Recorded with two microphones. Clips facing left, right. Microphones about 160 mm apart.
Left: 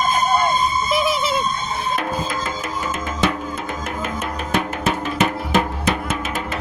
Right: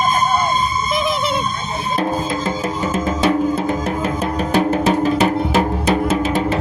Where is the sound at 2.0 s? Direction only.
30° right (ahead or behind).